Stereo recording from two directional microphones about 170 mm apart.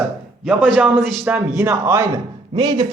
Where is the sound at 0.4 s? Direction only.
Centre (ahead or behind).